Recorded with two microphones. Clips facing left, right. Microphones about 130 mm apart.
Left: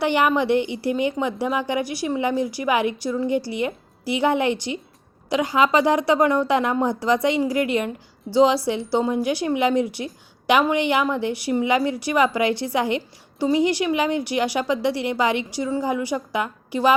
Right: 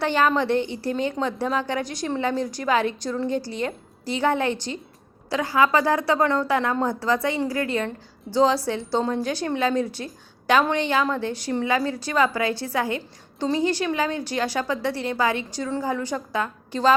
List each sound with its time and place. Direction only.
0.0 s a woman's voice: 15° left (ahead or behind)